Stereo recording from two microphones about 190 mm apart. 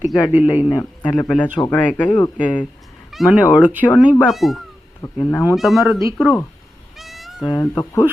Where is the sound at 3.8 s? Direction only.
15° left (ahead or behind).